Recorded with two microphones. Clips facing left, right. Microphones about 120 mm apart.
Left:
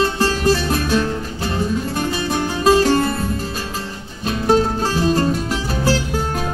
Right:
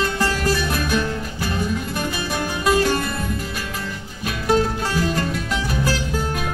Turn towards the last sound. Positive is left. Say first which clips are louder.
# left 3 dB
turn(degrees=35)  # may be behind; listen again after turning